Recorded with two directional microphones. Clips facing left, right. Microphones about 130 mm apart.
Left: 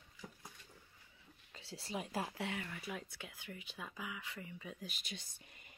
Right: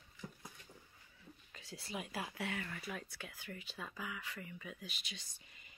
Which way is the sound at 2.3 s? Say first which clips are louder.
Even; 20° left (ahead or behind).